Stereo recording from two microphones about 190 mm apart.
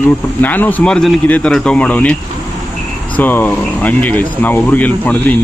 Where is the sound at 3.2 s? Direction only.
10° left (ahead or behind).